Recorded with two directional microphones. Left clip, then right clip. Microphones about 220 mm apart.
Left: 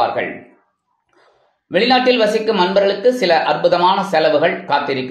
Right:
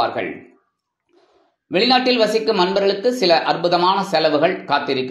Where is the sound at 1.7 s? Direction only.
20° right (ahead or behind).